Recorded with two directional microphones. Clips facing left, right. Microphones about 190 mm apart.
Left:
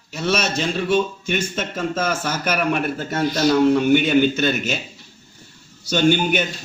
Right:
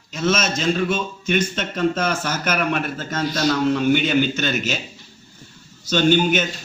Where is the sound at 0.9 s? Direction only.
10° left (ahead or behind).